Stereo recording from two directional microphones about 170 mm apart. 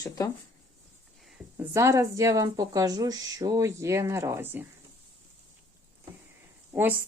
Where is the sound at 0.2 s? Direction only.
20° left (ahead or behind).